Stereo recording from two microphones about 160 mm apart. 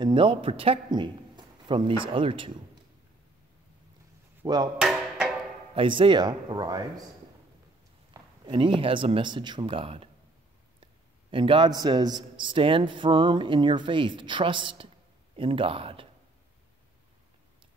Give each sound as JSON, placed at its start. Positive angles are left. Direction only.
{"t": 0.0, "sound": "a man's voice", "side_deg": -30}
{"t": 4.4, "sound": "speech", "side_deg": -25}
{"t": 4.7, "sound": "music", "side_deg": -5}
{"t": 5.8, "sound": "speech", "side_deg": -30}
{"t": 8.1, "sound": "speech", "side_deg": -30}
{"t": 11.2, "sound": "a man's voice", "side_deg": -35}